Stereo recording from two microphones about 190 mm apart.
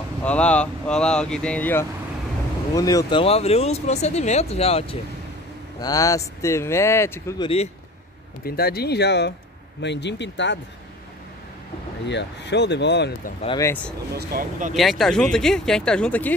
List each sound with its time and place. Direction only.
0.2 s speech: 5° left (ahead or behind); by 4.9 s 30° left (ahead or behind)
5.8 s speech: 20° left (ahead or behind)
7.4 s speech: 30° left (ahead or behind)
8.5 s speech: 55° left (ahead or behind)
12.1 s speech: 65° left (ahead or behind)
13.6 s speech: 15° left (ahead or behind)
14.1 s speech: 50° right (ahead or behind)
14.7 s speech: centre (ahead or behind)